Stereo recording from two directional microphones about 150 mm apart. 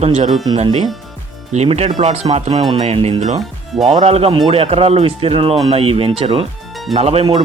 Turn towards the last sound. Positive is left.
turn(degrees=-40)  # may be behind; listen again after turning